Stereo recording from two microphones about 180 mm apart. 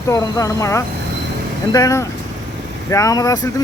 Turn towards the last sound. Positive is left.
turn(degrees=20)  # may be behind; listen again after turning